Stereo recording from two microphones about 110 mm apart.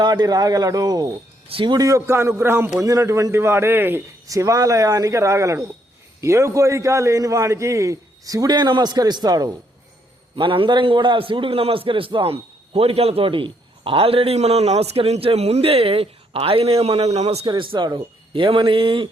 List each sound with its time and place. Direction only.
0.0 s a man's voice: 35° right (ahead or behind)
1.5 s a man's voice: 50° right (ahead or behind)
10.3 s a man's voice: 50° right (ahead or behind); by 17.4 s 75° right (ahead or behind)
17.4 s a man's voice: 50° right (ahead or behind)